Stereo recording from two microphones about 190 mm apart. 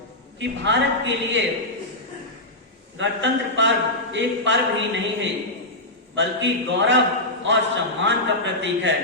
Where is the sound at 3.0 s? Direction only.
70° right (ahead or behind).